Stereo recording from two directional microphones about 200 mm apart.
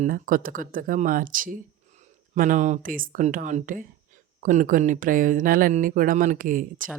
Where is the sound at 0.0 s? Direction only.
45° right (ahead or behind).